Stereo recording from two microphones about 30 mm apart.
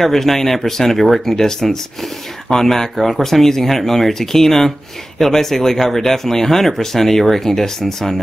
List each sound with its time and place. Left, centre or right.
0.0 s speech: centre
1.3 s speech: centre